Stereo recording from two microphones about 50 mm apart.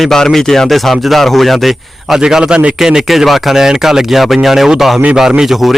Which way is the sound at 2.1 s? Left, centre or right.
Centre.